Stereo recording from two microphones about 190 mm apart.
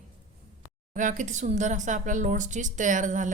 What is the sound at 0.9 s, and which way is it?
Speech, 40° right (ahead or behind).